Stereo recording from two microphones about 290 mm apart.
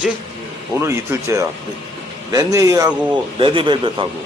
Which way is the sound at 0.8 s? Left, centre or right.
Centre.